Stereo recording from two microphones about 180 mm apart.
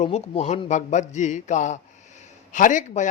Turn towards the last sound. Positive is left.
turn(degrees=45)  # may be behind; listen again after turning